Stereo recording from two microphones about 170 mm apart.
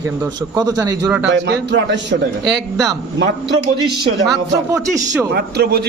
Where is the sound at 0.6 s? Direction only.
20° right (ahead or behind).